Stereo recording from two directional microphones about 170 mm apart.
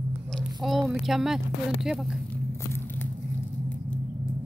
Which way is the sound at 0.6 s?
Centre (ahead or behind).